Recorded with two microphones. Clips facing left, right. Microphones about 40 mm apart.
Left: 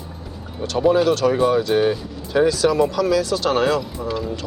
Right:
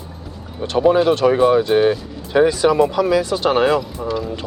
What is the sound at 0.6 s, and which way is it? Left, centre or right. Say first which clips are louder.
Speech: right 2 dB; centre.